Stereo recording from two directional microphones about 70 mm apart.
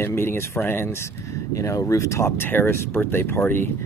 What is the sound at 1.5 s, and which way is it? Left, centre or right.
Speech, left.